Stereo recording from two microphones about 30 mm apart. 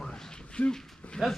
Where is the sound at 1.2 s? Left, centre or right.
Centre.